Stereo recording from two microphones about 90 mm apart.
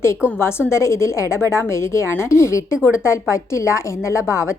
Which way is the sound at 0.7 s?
30° left (ahead or behind).